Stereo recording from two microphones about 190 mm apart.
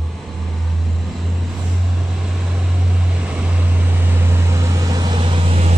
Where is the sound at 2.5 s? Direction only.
5° right (ahead or behind).